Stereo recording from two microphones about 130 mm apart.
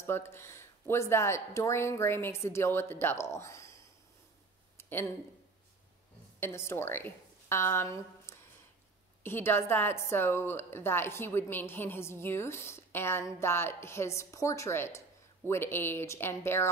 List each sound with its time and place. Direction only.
0.0 s a woman's voice: 20° left (ahead or behind)
4.7 s a sound: 15° left (ahead or behind)
6.4 s a woman's voice: 20° left (ahead or behind)